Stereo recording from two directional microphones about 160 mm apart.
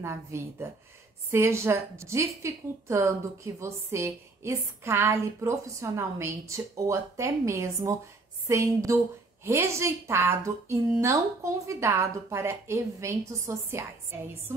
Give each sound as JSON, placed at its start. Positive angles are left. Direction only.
{"t": 0.0, "sound": "a woman's voice", "side_deg": -15}